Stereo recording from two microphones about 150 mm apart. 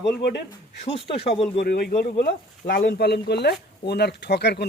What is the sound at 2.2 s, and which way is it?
Speech, 75° left (ahead or behind).